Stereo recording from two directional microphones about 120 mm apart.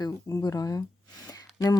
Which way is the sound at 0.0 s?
30° left (ahead or behind).